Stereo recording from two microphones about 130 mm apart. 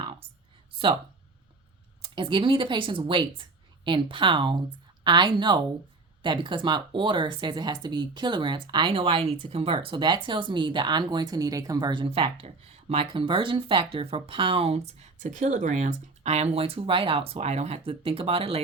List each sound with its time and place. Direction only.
0.0 s a sound: 40° right (ahead or behind)
2.0 s speech: 40° right (ahead or behind)
17.3 s speech: 60° right (ahead or behind)